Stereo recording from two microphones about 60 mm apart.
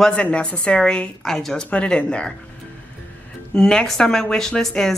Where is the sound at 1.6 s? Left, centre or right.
Centre.